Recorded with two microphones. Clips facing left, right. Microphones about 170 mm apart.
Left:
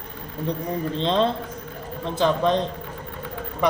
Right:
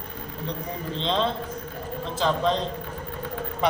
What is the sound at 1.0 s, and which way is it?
Speech, 40° left (ahead or behind).